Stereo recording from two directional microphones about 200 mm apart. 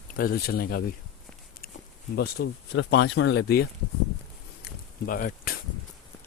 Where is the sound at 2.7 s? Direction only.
65° left (ahead or behind).